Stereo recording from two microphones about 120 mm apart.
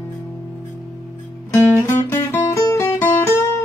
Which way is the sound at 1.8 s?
20° left (ahead or behind).